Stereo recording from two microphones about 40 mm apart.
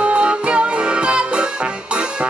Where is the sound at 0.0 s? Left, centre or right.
Right.